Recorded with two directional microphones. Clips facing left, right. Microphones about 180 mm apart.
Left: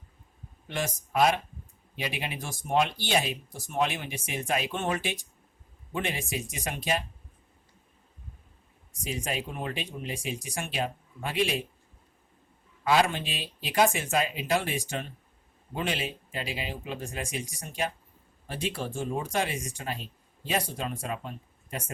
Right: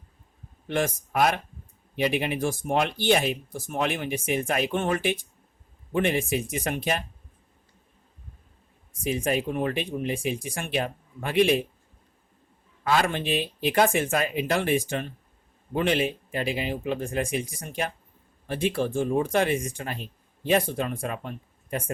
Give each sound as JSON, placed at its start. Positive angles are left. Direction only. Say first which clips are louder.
{"t": 0.7, "sound": "speech", "louder": "right 5 dB", "side_deg": -55}
{"t": 8.9, "sound": "speech", "louder": "right 7 dB", "side_deg": -55}
{"t": 12.8, "sound": "speech", "louder": "even", "side_deg": -50}